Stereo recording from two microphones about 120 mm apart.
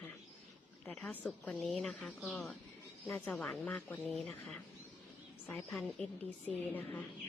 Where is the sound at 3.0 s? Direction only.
15° left (ahead or behind).